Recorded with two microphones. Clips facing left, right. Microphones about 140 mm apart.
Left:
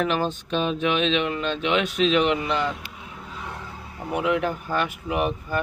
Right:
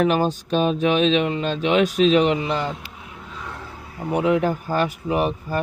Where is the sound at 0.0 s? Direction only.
40° right (ahead or behind).